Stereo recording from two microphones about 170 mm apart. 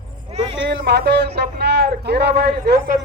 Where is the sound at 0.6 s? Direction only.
85° right; by 3.0 s 70° right (ahead or behind).